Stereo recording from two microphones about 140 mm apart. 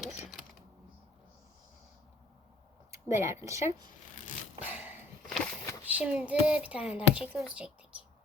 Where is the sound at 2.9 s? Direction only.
20° right (ahead or behind).